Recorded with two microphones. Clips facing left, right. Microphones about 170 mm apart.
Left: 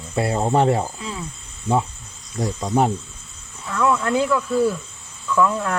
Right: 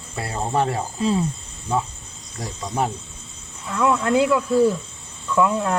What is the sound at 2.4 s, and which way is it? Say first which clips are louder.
Speech: left 5 dB; 25° left (ahead or behind).